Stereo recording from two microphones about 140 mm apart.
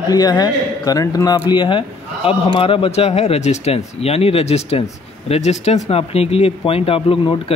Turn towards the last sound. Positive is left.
turn(degrees=40)  # may be behind; listen again after turning